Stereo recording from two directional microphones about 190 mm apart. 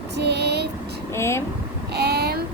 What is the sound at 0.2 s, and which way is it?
Vehicle, 60° right (ahead or behind).